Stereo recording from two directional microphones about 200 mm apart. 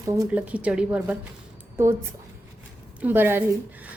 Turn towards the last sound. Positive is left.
turn(degrees=-10)  # may be behind; listen again after turning